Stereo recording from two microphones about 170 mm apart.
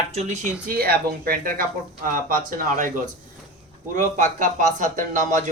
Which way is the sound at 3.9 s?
50° right (ahead or behind).